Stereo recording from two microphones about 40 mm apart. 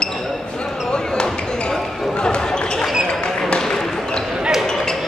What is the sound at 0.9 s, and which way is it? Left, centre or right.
Basketball bounce, left.